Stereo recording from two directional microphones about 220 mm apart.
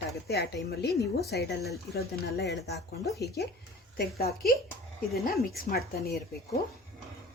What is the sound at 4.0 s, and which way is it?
Speech, 45° left (ahead or behind).